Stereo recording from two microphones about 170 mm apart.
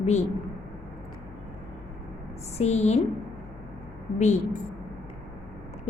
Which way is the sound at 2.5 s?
40° left (ahead or behind).